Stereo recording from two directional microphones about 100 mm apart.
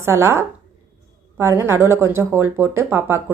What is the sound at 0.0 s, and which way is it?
A woman's voice, 25° right (ahead or behind).